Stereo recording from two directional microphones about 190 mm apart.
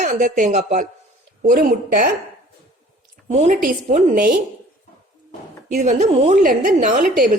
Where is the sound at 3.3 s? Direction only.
40° right (ahead or behind).